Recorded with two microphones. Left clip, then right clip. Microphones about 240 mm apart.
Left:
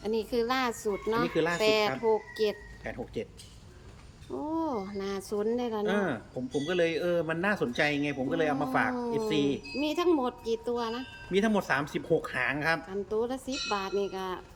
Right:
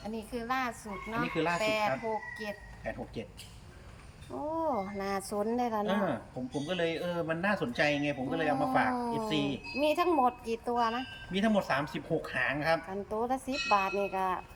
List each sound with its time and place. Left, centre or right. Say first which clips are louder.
0.0 s speech: left 10 dB; centre
4.4 s speech: even; centre